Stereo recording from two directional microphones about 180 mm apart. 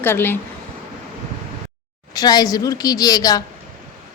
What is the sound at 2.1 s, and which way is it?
A woman's voice, 20° left (ahead or behind).